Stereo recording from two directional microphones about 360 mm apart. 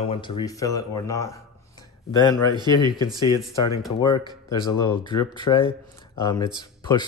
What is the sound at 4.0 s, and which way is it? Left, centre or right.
Speech, centre.